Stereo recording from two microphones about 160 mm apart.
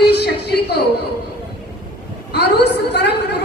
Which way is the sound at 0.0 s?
90° left.